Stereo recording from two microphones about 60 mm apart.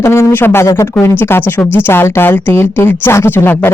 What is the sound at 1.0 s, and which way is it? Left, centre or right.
Speech, left.